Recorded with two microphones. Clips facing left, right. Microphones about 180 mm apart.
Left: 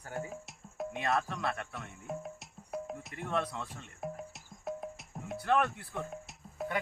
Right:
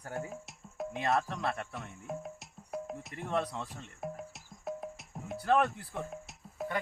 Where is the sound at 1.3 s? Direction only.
35° right (ahead or behind).